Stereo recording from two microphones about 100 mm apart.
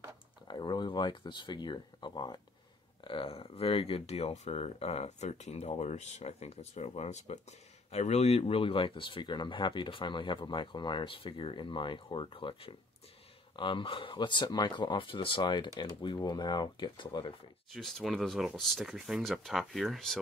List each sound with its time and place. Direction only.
0.5 s speech: 45° left (ahead or behind)
3.0 s speech: 60° left (ahead or behind)
17.6 s speech: centre (ahead or behind)